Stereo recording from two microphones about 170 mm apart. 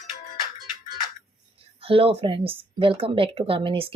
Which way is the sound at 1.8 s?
35° right (ahead or behind).